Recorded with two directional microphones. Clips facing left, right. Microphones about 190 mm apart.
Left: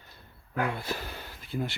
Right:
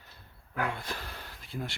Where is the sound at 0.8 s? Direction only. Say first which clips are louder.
Left 4 dB; 5° left (ahead or behind).